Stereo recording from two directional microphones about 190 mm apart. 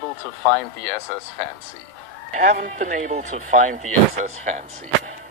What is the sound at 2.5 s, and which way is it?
Speech, 45° right (ahead or behind).